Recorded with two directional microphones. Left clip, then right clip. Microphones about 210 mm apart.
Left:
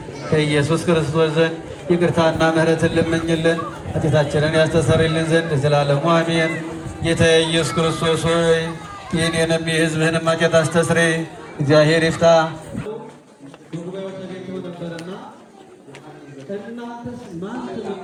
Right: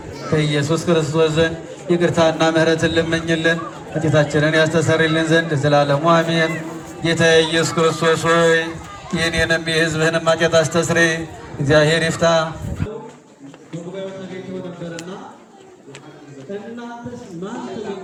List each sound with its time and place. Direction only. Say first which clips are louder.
0.3 s a man's voice: left 1 dB; 10° right (ahead or behind); by 12.5 s 50° right (ahead or behind)